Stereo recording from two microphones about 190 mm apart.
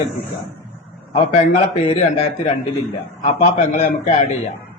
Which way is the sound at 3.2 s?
35° left (ahead or behind).